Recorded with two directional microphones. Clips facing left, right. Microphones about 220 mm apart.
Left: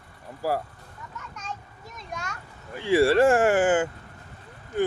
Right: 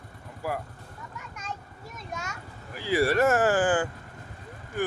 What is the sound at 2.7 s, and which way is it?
Speech, 25° left (ahead or behind).